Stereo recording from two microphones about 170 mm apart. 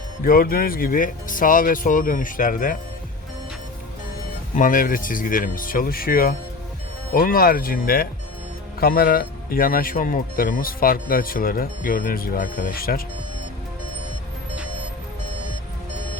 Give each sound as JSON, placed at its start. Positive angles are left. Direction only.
{"t": 0.3, "sound": "speech", "side_deg": 60}
{"t": 4.5, "sound": "speech", "side_deg": 50}